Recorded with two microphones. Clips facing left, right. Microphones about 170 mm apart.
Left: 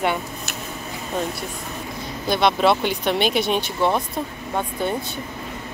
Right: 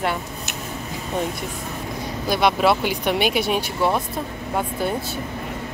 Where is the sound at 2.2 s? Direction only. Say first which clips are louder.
Even; 10° right (ahead or behind).